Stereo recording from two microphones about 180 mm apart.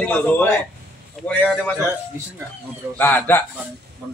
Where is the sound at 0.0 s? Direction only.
10° left (ahead or behind).